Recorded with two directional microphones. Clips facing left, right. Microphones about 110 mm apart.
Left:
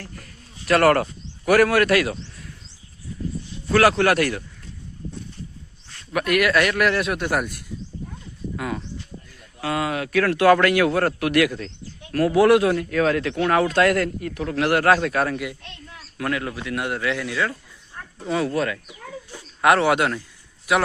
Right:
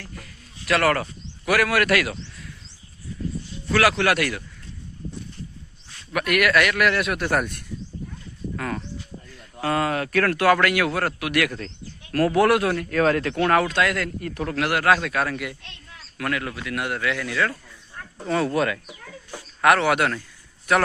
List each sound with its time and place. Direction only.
0.7 s a man's voice: 45° left (ahead or behind)
3.7 s a man's voice: 35° left (ahead or behind)
6.1 s a man's voice: 30° left (ahead or behind)
7.2 s speech: 10° left (ahead or behind)
10.3 s a man's voice: 30° left (ahead or behind)
12.1 s speech: 5° left (ahead or behind)
12.4 s a man's voice: 20° left (ahead or behind)
12.9 s speech: centre (ahead or behind)
13.7 s a man's voice: 40° left (ahead or behind)
14.2 s speech: 5° left (ahead or behind)
14.7 s a man's voice: 35° left (ahead or behind); by 17.5 s 20° left (ahead or behind)
18.3 s speech: centre (ahead or behind)
19.6 s a man's voice: 25° left (ahead or behind)